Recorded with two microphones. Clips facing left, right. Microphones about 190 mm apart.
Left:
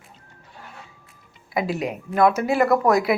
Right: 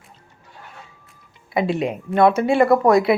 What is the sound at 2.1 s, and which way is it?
Speech, 25° right (ahead or behind).